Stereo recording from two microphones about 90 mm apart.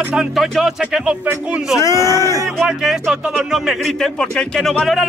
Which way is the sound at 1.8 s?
35° left (ahead or behind).